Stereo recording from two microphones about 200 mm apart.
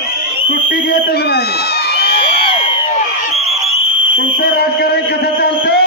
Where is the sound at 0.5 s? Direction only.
50° left (ahead or behind).